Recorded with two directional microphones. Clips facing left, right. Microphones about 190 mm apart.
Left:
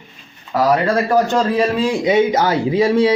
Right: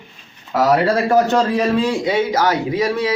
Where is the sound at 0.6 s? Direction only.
10° right (ahead or behind).